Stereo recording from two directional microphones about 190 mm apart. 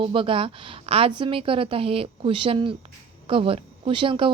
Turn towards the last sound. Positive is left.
turn(degrees=-25)  # may be behind; listen again after turning